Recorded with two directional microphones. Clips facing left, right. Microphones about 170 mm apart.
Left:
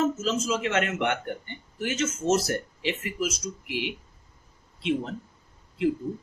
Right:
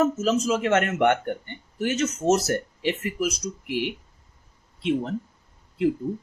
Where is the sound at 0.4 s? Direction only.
45° right (ahead or behind).